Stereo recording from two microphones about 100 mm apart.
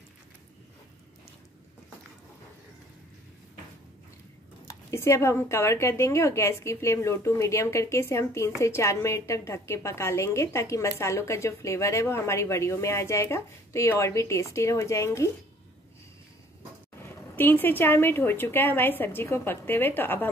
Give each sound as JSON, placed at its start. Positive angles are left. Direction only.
{"t": 4.9, "sound": "a woman's voice", "side_deg": 30}
{"t": 17.0, "sound": "a woman's voice", "side_deg": 20}